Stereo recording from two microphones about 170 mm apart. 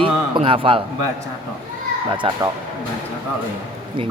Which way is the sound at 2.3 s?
35° right (ahead or behind).